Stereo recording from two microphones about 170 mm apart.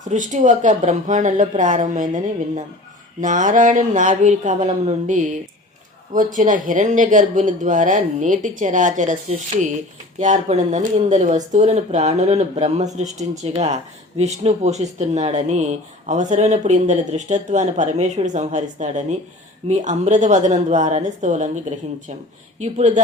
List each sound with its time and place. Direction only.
0.0 s speech: 45° right (ahead or behind)
22.6 s speech: 45° right (ahead or behind)